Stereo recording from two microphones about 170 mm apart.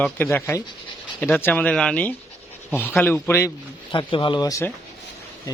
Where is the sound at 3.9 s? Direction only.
30° left (ahead or behind).